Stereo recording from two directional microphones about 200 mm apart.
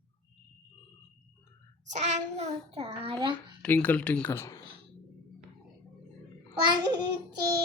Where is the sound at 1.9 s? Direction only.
35° right (ahead or behind).